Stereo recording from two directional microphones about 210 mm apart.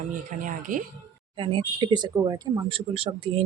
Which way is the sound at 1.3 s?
25° right (ahead or behind).